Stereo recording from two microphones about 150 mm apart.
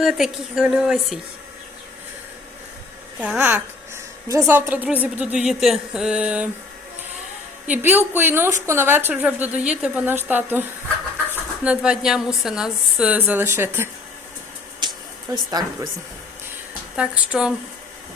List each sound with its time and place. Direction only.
0.0 s a woman's voice: 5° right (ahead or behind)
3.2 s a woman's voice: 10° right (ahead or behind)
7.7 s a woman's voice: 15° right (ahead or behind)
15.3 s speech: 25° right (ahead or behind)
17.0 s a woman's voice: 5° right (ahead or behind)